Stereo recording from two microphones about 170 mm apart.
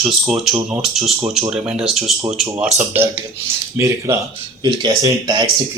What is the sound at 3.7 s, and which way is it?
Speech, 15° right (ahead or behind).